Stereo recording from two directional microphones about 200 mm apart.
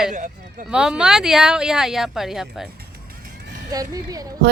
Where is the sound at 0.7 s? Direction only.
5° right (ahead or behind).